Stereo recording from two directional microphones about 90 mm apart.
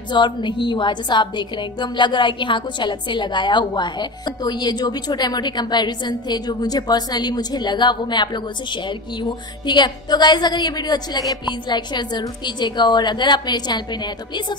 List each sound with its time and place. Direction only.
0.1 s a woman's voice: 60° left (ahead or behind)